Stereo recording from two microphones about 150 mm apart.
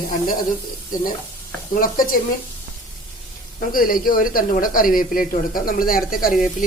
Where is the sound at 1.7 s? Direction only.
65° left (ahead or behind).